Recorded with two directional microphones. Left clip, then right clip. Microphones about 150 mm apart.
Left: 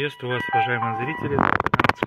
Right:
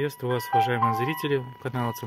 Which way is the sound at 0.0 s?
25° right (ahead or behind).